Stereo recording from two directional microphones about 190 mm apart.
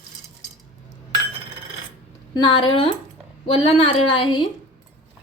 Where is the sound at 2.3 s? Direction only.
25° left (ahead or behind).